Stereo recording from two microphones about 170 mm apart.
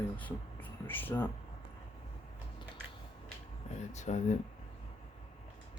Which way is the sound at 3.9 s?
45° left (ahead or behind).